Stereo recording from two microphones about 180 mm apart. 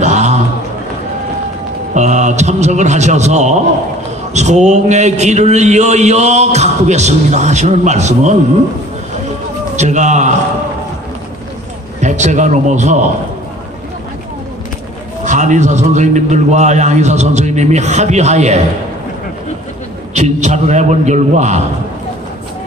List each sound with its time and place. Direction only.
0.0 s a sound: 40° right (ahead or behind)
2.0 s a man's voice: 40° right (ahead or behind)
9.8 s a man's voice: 40° right (ahead or behind)
12.0 s a man's voice: 40° right (ahead or behind)
15.2 s a man's voice: 45° right (ahead or behind)
20.2 s a man's voice: 40° right (ahead or behind)